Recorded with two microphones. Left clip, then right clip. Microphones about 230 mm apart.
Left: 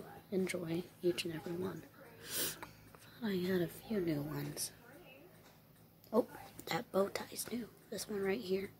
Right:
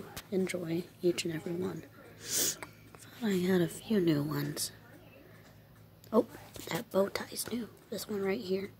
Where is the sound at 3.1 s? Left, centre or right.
Centre.